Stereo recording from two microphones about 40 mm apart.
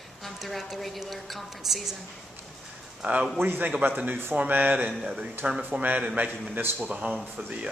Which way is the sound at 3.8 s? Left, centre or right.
Right.